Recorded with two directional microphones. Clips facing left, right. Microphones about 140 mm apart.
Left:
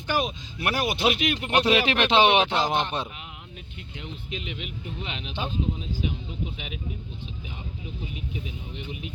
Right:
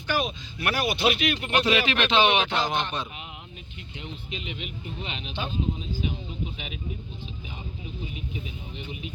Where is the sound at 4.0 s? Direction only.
55° left (ahead or behind).